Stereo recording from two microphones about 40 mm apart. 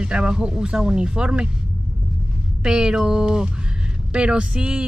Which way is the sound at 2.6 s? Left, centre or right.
Centre.